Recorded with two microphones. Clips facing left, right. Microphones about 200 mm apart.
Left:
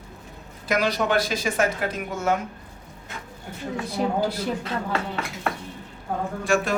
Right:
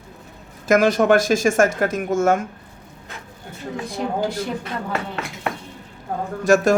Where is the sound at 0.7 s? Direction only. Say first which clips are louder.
Right 8 dB; 50° right (ahead or behind).